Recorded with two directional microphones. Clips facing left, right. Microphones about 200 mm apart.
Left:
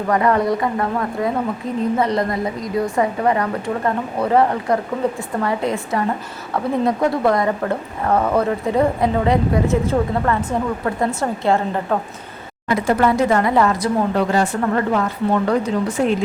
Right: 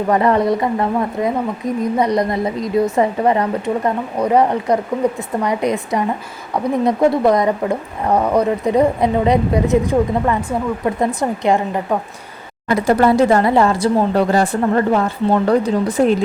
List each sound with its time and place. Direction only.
0.1 s a woman's voice: 25° right (ahead or behind)
12.7 s speech: 40° right (ahead or behind)